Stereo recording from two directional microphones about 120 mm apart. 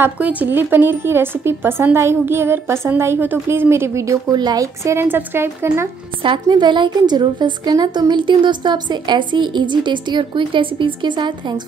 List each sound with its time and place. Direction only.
0.0 s a woman's voice: 15° right (ahead or behind)
6.4 s a woman's voice: 40° right (ahead or behind)